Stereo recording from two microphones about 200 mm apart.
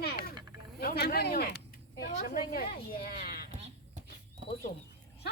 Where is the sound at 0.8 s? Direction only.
50° left (ahead or behind).